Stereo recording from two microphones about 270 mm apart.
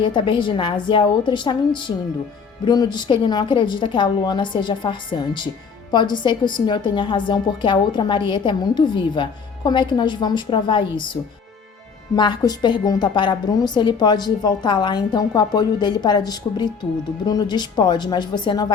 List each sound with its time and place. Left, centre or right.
0.0 s a woman's voice: centre